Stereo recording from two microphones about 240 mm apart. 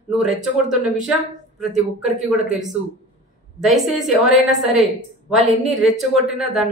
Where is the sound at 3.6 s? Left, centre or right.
Centre.